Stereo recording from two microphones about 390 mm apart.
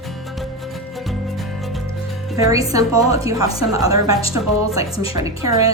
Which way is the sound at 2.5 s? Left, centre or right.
Centre.